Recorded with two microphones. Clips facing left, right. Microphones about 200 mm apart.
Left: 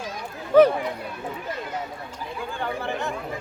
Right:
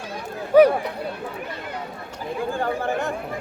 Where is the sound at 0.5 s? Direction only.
10° right (ahead or behind).